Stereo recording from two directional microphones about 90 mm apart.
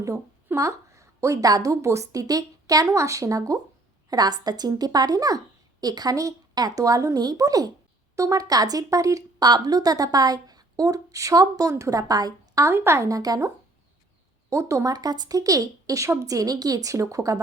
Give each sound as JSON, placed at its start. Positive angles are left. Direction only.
{"t": 0.5, "sound": "a woman's voice", "side_deg": -35}
{"t": 12.7, "sound": "speech", "side_deg": -25}
{"t": 13.1, "sound": "a woman's voice", "side_deg": -40}
{"t": 14.5, "sound": "a woman's voice", "side_deg": -35}